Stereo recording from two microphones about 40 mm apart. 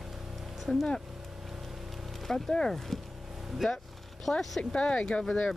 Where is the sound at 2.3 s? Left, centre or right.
Centre.